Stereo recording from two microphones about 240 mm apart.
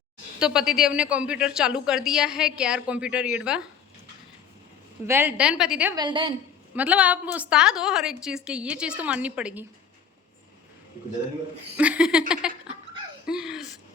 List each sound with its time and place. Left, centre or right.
0.3 s speech: centre
5.0 s speech: centre
6.0 s a woman's voice: centre
6.7 s speech: centre
11.8 s speech: centre
12.4 s a sound: centre